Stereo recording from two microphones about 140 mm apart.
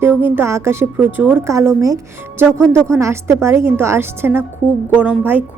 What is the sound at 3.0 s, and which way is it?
A woman's voice, 20° right (ahead or behind).